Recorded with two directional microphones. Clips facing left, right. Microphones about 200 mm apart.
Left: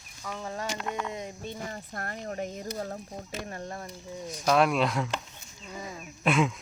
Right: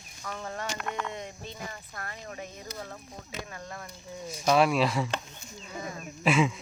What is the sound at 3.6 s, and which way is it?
Speech, 25° left (ahead or behind).